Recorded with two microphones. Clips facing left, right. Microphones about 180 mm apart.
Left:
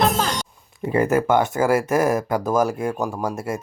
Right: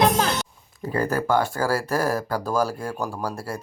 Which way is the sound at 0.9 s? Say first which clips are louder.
Left 4 dB; 20° left (ahead or behind).